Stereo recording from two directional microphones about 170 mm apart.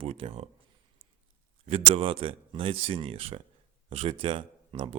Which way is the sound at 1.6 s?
35° right (ahead or behind).